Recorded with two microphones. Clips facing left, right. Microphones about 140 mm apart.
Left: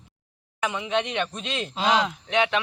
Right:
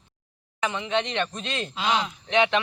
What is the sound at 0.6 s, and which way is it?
Speech, 10° left (ahead or behind).